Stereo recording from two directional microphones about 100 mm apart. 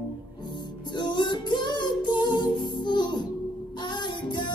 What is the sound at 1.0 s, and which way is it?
Music, 50° left (ahead or behind).